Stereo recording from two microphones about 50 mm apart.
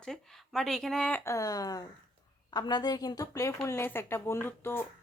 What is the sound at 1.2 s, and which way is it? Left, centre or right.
Speech, left.